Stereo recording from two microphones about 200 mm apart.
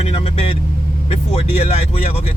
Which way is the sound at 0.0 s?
30° left (ahead or behind).